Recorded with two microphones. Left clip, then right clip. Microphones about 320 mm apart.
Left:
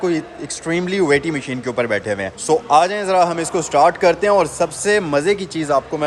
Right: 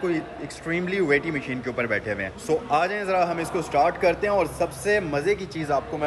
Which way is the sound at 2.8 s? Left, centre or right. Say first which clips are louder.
Left 7 dB; centre.